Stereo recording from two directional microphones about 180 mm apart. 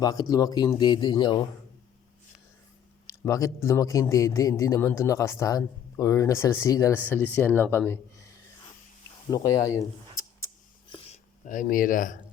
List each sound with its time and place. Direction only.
0.0 s speech: 20° left (ahead or behind)
3.1 s a man's voice: 15° left (ahead or behind)
9.3 s speech: 20° left (ahead or behind)
10.8 s a sound: 30° left (ahead or behind)
11.4 s speech: 45° left (ahead or behind)